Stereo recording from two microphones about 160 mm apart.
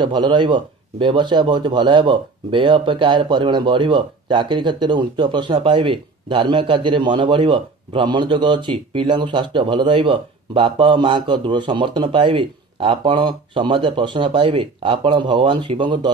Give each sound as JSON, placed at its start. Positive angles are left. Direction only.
{"t": 0.0, "sound": "speech", "side_deg": -30}